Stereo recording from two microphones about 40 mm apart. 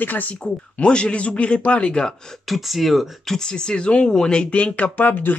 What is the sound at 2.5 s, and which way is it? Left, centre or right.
Speech, centre.